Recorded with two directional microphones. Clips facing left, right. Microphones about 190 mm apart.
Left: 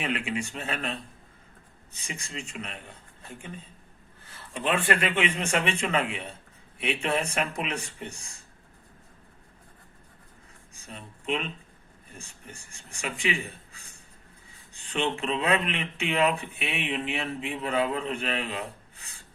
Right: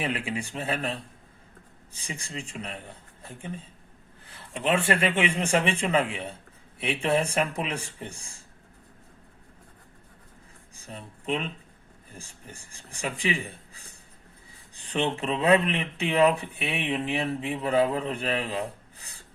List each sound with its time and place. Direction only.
0.0 s a man's voice: 30° right (ahead or behind)
2.0 s a man's voice: 35° right (ahead or behind)
4.5 s a man's voice: 25° right (ahead or behind)
10.9 s a man's voice: 30° right (ahead or behind)
12.7 s a man's voice: 35° right (ahead or behind)
15.2 s a man's voice: 35° right (ahead or behind)